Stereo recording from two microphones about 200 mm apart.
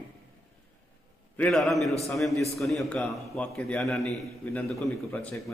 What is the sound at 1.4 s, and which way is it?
A man's voice, centre (ahead or behind).